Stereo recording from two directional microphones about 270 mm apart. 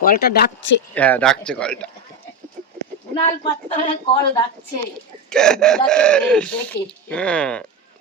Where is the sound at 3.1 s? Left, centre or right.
Left.